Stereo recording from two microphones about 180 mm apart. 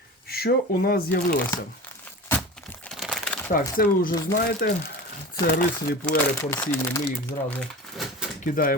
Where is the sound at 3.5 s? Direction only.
50° left (ahead or behind).